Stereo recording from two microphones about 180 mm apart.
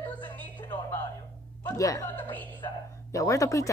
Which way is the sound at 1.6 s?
15° left (ahead or behind).